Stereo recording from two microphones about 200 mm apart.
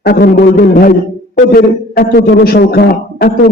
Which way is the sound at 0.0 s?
55° left (ahead or behind).